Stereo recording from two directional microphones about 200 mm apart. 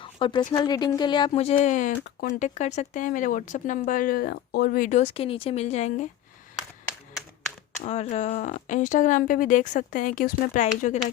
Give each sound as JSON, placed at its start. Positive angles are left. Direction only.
{"t": 0.0, "sound": "a sound", "side_deg": 25}
{"t": 0.5, "sound": "speech", "side_deg": 20}
{"t": 7.8, "sound": "speech", "side_deg": 35}